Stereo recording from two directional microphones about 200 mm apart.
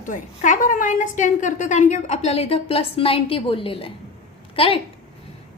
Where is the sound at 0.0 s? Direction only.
40° left (ahead or behind).